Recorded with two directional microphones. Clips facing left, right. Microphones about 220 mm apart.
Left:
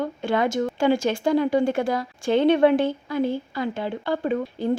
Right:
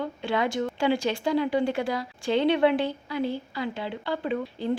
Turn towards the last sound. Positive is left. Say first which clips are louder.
# left 4 dB
turn(degrees=45)  # may be behind; listen again after turning